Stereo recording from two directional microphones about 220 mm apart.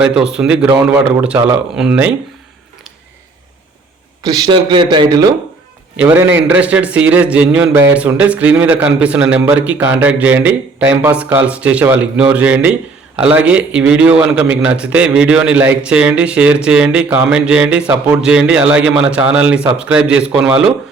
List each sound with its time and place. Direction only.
0.0 s speech: 5° right (ahead or behind)
4.2 s a man's voice: 15° right (ahead or behind)
6.3 s speech: 5° right (ahead or behind)